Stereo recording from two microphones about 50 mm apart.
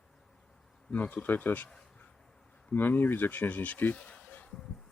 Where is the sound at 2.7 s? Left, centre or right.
Left.